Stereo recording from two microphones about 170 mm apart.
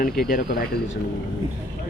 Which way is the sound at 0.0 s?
60° left (ahead or behind).